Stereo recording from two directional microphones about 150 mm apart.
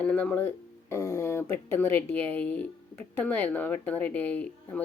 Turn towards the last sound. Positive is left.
turn(degrees=10)  # may be behind; listen again after turning